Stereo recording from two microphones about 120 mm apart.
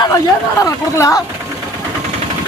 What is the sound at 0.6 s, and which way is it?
Speech, 30° left (ahead or behind).